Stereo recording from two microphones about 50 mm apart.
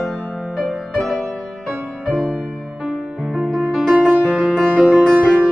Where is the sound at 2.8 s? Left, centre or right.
Centre.